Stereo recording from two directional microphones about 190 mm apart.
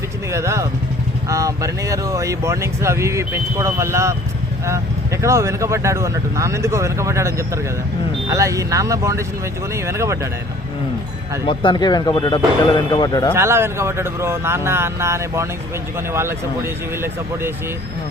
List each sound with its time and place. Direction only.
0.3 s speech: 15° right (ahead or behind)
11.4 s speech: 25° left (ahead or behind)
13.3 s speech: 15° right (ahead or behind)